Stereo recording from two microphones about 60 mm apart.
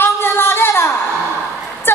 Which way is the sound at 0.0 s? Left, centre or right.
Left.